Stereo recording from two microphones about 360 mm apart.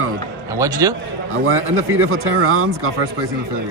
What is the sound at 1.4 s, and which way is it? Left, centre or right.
Speech, right.